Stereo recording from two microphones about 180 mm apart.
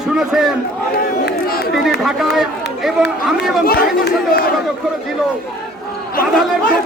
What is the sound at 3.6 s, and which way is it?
Speech, 55° left (ahead or behind).